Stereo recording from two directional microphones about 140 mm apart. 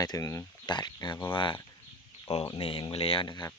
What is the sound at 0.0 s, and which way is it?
Speech, 25° left (ahead or behind).